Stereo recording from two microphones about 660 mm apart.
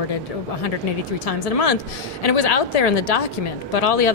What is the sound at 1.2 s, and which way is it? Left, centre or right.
A woman's voice, left.